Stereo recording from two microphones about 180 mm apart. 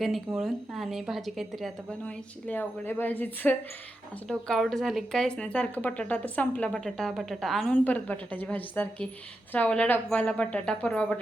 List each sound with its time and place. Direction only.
0.3 s a woman's voice: centre (ahead or behind)